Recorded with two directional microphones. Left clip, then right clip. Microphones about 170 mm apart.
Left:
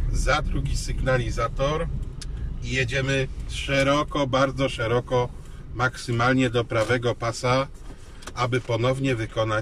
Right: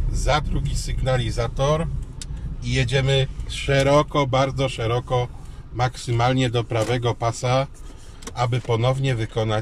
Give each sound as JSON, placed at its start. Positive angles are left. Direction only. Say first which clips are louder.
{"t": 0.2, "sound": "a man's voice", "louder": "right 2 dB", "side_deg": -25}